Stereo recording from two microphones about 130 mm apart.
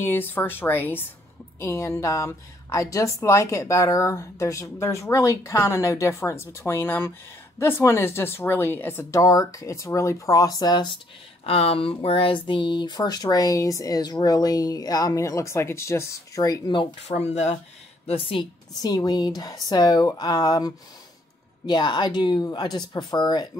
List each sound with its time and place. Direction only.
0.0 s speech: 15° left (ahead or behind); by 11.0 s 35° left (ahead or behind)
11.4 s speech: 50° left (ahead or behind); by 16.8 s 30° left (ahead or behind)
17.1 s speech: 60° left (ahead or behind)
18.0 s a woman's voice: 45° left (ahead or behind)
18.8 s speech: 30° left (ahead or behind)